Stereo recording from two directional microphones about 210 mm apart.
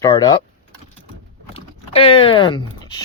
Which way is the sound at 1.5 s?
25° left (ahead or behind).